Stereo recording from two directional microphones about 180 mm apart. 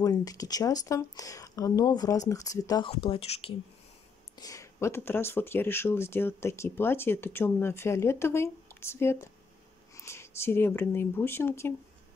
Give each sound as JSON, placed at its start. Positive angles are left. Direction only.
{"t": 0.0, "sound": "speech", "side_deg": 20}
{"t": 4.4, "sound": "speech", "side_deg": 20}